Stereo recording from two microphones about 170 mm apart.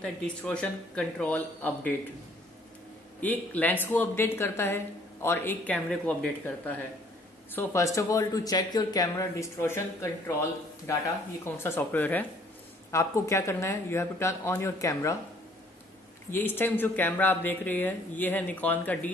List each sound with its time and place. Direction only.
0.0 s a woman's voice: 5° left (ahead or behind)
3.2 s a woman's voice: 10° left (ahead or behind)
16.3 s a woman's voice: 10° left (ahead or behind)